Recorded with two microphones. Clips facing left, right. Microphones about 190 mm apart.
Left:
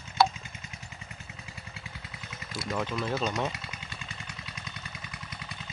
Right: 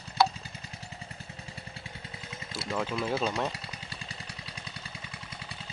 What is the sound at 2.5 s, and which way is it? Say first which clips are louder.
Speech: even; 5° right (ahead or behind).